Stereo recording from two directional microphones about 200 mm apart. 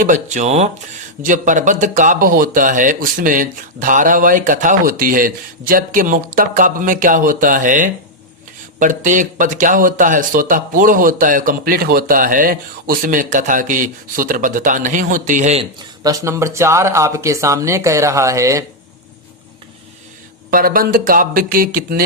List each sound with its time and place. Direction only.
0.0 s speech: 40° right (ahead or behind)
16.0 s speech: 15° right (ahead or behind)
20.5 s speech: 45° right (ahead or behind)